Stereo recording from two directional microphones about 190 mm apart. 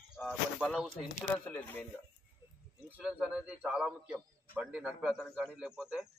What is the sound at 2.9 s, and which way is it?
A man's voice, 5° right (ahead or behind).